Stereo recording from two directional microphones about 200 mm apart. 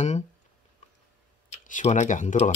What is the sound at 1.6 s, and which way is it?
Speech, 40° left (ahead or behind).